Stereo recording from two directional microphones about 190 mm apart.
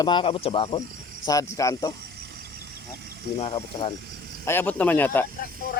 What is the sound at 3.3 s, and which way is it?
Speech, 30° left (ahead or behind).